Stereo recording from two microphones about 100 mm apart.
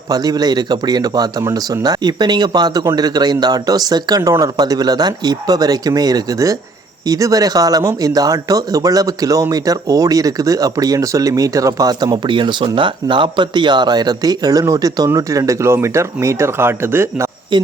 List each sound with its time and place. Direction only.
0.1 s speech: 40° right (ahead or behind); by 17.2 s 25° right (ahead or behind)
17.5 s speech: 50° right (ahead or behind)